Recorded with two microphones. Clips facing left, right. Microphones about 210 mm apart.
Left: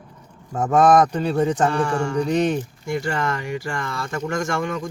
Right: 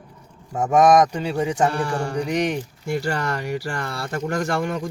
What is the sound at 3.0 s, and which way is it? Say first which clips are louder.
Speech: left 2 dB; 40° right (ahead or behind).